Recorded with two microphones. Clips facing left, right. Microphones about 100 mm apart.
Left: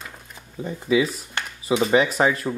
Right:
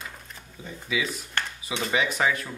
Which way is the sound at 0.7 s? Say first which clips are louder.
Left 9 dB; 35° left (ahead or behind).